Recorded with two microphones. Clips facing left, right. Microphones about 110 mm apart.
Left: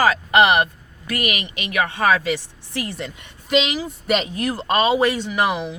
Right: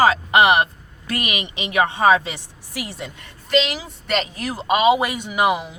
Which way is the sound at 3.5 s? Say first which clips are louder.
Even; centre (ahead or behind).